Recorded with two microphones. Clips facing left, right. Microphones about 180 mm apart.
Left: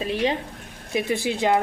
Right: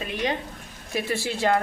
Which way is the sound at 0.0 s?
30° left (ahead or behind).